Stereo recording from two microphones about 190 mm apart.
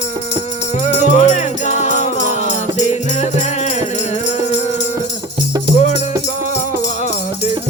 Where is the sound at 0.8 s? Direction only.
35° left (ahead or behind).